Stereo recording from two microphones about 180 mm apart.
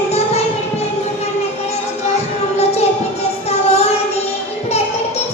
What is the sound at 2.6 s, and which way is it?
Music, 35° left (ahead or behind).